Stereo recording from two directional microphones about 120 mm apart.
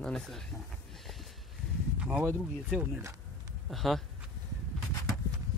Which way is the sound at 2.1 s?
20° right (ahead or behind).